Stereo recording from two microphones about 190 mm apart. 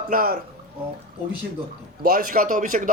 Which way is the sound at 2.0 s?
50° right (ahead or behind).